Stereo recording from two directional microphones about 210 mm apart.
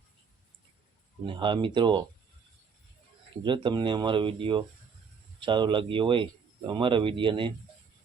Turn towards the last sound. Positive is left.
turn(degrees=-25)  # may be behind; listen again after turning